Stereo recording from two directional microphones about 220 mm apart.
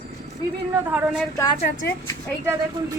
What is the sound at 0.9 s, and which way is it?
Speech, 5° right (ahead or behind).